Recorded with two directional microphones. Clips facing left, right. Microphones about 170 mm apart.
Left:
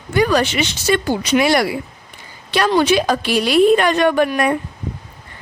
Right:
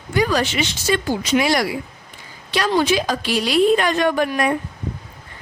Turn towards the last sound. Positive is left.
turn(degrees=60)  # may be behind; listen again after turning